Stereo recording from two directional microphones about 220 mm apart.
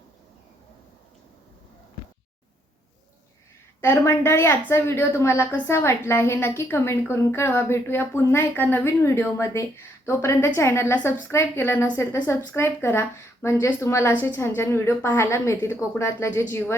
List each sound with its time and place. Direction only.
3.8 s a woman's voice: 10° left (ahead or behind)